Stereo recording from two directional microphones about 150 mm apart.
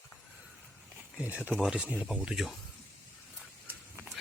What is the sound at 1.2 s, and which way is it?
Speech, 10° right (ahead or behind).